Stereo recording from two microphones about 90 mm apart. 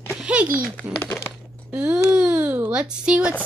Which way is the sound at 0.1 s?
10° right (ahead or behind).